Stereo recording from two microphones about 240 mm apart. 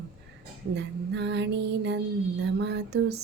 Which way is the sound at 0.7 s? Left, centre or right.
Right.